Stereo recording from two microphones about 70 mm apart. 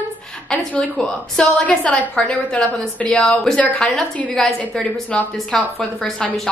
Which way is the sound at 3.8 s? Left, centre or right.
Centre.